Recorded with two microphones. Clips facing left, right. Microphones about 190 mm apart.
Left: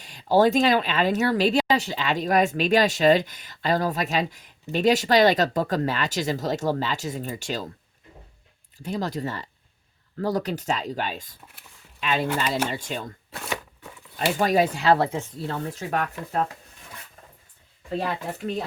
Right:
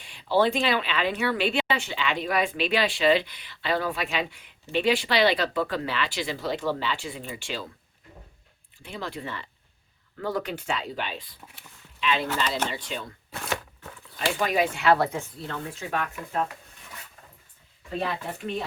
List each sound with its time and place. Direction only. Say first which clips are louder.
0.0 s speech: left 4 dB; 40° left (ahead or behind)
8.8 s speech: left 7 dB; 40° left (ahead or behind)
13.3 s speech: right 1 dB; centre (ahead or behind)
14.2 s speech: left 4 dB; 40° left (ahead or behind)
15.4 s speech: left 4 dB; 40° left (ahead or behind)